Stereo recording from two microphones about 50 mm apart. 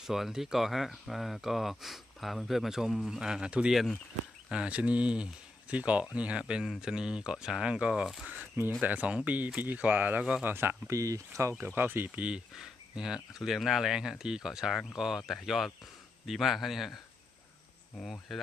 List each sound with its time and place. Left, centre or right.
0.0 s speech: centre; by 10.2 s right
10.4 s speech: right
10.9 s speech: right
11.6 s speech: right
12.5 s speech: centre
18.3 s speech: centre